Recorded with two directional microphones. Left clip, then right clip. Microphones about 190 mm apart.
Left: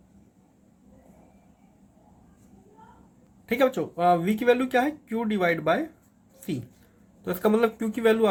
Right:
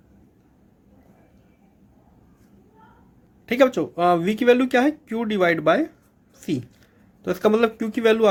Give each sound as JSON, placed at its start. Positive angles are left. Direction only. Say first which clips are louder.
{"t": 3.4, "sound": "speech", "louder": "right 5 dB", "side_deg": -45}